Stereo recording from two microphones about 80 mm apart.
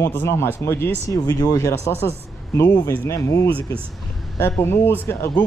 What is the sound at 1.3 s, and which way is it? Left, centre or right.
Speech, left.